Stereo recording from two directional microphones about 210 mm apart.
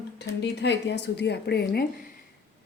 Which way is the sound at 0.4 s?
55° left (ahead or behind).